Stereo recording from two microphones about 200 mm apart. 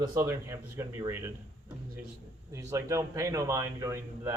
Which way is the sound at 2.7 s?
15° right (ahead or behind).